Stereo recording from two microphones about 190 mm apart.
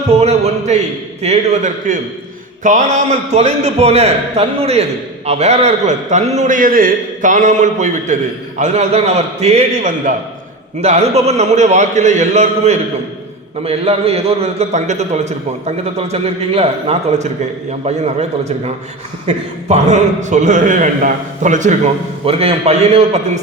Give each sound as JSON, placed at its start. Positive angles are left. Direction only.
{"t": 0.1, "sound": "a man's voice", "side_deg": -35}